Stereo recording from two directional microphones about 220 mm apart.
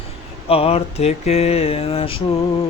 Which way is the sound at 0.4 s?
25° left (ahead or behind).